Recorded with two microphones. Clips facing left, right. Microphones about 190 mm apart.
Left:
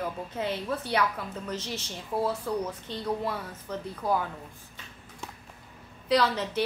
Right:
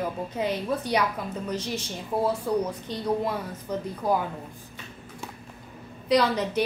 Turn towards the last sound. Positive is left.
turn(degrees=-15)  # may be behind; listen again after turning